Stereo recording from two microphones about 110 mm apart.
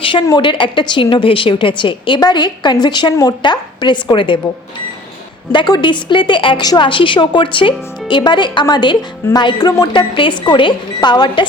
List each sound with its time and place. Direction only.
0.0 s a woman's voice: 50° left (ahead or behind)
5.5 s a woman's voice: 45° left (ahead or behind)